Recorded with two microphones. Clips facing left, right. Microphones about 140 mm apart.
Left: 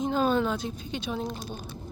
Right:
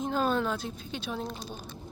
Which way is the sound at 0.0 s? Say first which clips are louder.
Left 3 dB; centre (ahead or behind).